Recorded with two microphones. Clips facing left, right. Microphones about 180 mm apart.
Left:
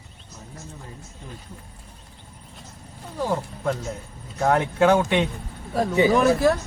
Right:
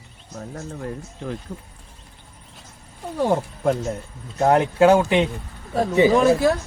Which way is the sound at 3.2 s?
45° right (ahead or behind).